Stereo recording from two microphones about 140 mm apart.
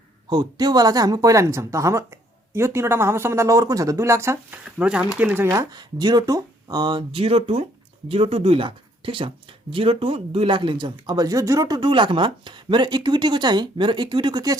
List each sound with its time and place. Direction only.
0.3 s speech: 30° right (ahead or behind)
4.8 s speech: 10° right (ahead or behind); by 14.6 s 30° right (ahead or behind)